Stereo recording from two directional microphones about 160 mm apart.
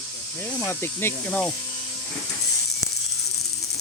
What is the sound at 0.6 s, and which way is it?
Speech, 15° left (ahead or behind).